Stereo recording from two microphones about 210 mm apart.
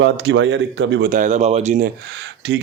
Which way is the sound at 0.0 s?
55° right (ahead or behind).